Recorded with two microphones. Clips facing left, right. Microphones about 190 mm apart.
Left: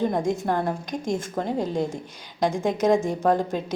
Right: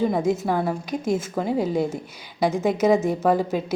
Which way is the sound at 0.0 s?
5° right (ahead or behind).